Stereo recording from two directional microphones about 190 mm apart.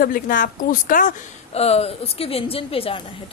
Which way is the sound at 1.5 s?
35° left (ahead or behind).